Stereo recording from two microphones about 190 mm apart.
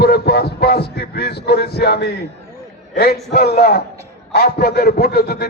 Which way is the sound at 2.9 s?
55° left (ahead or behind).